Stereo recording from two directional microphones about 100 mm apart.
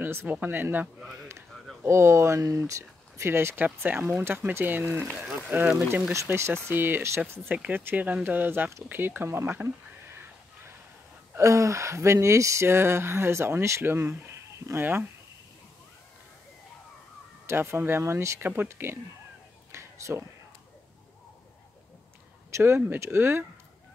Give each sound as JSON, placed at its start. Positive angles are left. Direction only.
{"t": 0.0, "sound": "speech", "side_deg": -20}
{"t": 17.5, "sound": "speech", "side_deg": -25}
{"t": 19.7, "sound": "a sound", "side_deg": -30}
{"t": 22.5, "sound": "speech", "side_deg": -25}